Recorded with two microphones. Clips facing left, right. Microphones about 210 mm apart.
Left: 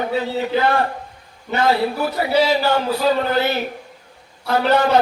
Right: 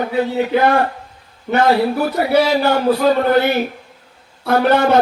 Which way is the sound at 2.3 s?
55° right (ahead or behind).